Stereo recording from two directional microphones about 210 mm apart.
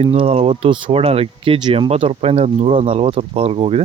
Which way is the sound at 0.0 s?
25° right (ahead or behind).